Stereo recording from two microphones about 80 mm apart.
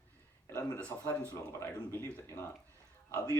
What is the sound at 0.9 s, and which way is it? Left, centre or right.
Speech, left.